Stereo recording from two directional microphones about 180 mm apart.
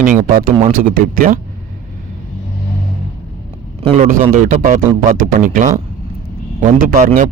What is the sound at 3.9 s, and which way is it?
Speech, 45° right (ahead or behind).